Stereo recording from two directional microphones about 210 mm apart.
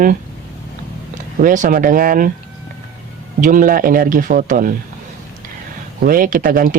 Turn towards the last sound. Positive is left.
turn(degrees=-40)  # may be behind; listen again after turning